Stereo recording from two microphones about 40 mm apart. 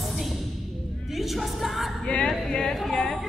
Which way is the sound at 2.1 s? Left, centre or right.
Left.